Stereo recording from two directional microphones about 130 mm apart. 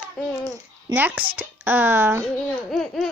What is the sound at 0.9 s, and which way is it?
Speech, 15° right (ahead or behind).